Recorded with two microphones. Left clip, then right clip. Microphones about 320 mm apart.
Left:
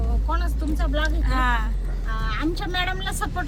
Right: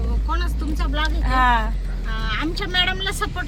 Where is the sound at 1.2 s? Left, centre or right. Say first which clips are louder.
Right 9 dB; centre.